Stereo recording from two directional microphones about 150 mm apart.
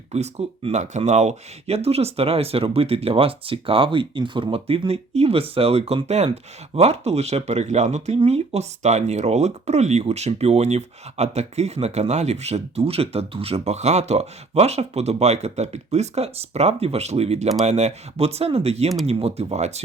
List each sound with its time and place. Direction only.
0.1 s speech: 45° right (ahead or behind)